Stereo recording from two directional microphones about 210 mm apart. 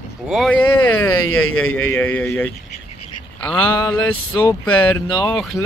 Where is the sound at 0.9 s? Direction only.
90° left.